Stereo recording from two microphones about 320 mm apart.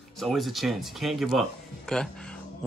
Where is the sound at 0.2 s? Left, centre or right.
Centre.